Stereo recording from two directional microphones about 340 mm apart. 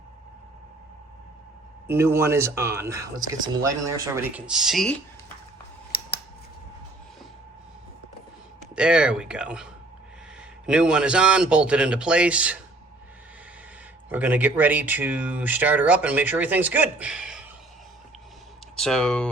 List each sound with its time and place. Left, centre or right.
1.9 s speech: centre
5.9 s scissors: left
8.7 s speech: centre
10.7 s speech: centre
14.1 s speech: centre
18.8 s speech: centre